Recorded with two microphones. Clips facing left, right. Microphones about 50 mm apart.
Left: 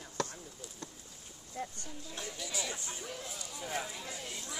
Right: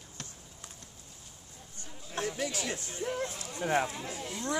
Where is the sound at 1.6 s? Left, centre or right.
Left.